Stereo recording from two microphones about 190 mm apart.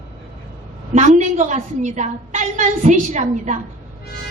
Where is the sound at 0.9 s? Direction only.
40° right (ahead or behind).